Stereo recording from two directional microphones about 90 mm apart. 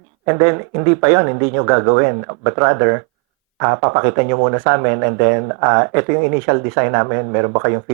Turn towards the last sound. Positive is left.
turn(degrees=-25)  # may be behind; listen again after turning